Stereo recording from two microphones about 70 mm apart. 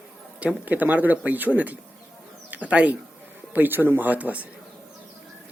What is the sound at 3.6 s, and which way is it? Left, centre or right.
Speech, right.